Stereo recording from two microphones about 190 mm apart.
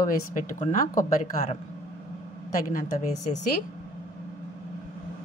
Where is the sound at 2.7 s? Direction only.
40° left (ahead or behind).